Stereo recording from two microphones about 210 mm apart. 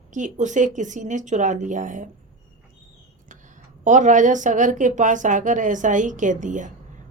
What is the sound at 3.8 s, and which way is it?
A woman's voice, 35° right (ahead or behind).